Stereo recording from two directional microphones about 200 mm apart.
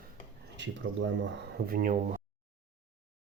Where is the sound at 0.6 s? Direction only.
60° right (ahead or behind).